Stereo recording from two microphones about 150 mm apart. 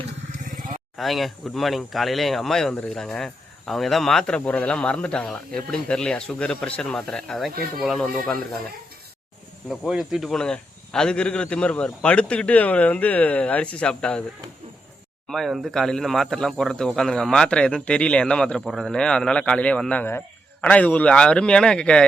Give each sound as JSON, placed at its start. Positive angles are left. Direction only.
{"t": 0.9, "sound": "speech", "side_deg": 0}
{"t": 9.6, "sound": "speech", "side_deg": 0}
{"t": 15.3, "sound": "speech", "side_deg": 0}